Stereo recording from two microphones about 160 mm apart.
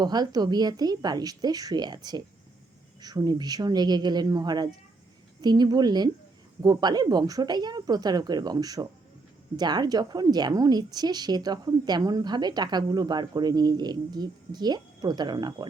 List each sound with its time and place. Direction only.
0.0 s a woman's voice: 25° right (ahead or behind)